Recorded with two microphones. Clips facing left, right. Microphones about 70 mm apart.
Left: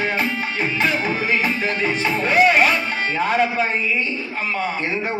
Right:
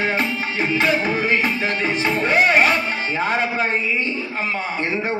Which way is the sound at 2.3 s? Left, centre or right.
Right.